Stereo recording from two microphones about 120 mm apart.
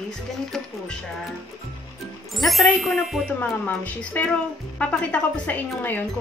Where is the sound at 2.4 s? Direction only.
Centre (ahead or behind).